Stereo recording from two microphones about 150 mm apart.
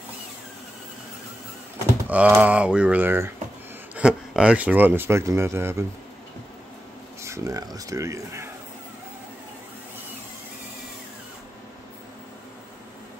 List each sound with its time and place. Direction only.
2.0 s speech: 10° right (ahead or behind)
7.2 s speech: 20° right (ahead or behind)